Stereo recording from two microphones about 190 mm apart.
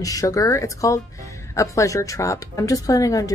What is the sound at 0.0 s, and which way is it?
A woman's voice, 20° left (ahead or behind).